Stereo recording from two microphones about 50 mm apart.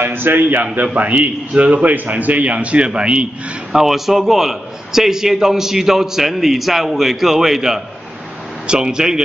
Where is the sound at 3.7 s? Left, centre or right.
Centre.